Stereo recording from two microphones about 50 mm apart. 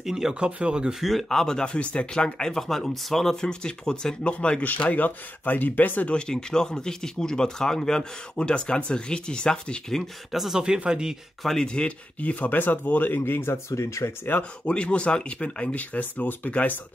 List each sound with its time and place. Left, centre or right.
0.0 s speech: centre
0.5 s speech: right
1.0 s speech: centre; by 4.6 s left
4.6 s speech: left
6.0 s speech: centre
10.3 s speech: centre
10.8 s speech: centre
11.4 s speech: centre
12.2 s speech: left
14.6 s speech: left